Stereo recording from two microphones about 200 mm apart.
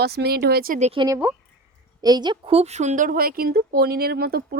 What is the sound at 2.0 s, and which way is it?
Speech, 20° right (ahead or behind).